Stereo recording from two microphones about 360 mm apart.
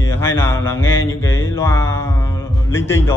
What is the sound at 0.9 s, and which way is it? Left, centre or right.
Speech, left.